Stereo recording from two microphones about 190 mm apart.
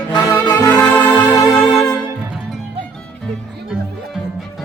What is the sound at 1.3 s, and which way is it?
Music, 15° left (ahead or behind).